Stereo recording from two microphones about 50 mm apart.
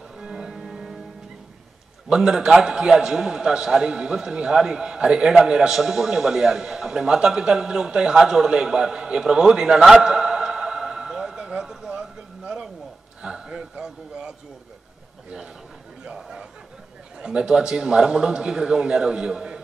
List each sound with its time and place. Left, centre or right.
0.2 s music: centre
2.0 s a man's voice: centre
10.0 s music: centre
13.2 s a sound: centre
16.0 s a sound: centre
17.2 s a man's voice: centre